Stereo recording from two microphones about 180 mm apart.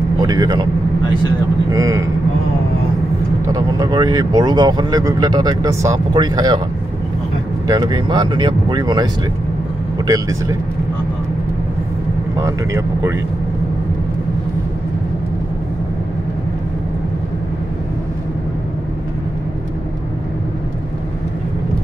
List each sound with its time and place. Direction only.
0.2 s speech: 20° right (ahead or behind)
1.7 s speech: 20° right (ahead or behind)
3.4 s speech: 20° right (ahead or behind)
7.6 s speech: 20° right (ahead or behind)
12.4 s speech: 15° right (ahead or behind)